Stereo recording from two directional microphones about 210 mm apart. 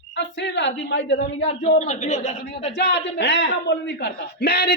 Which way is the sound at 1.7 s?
35° left (ahead or behind).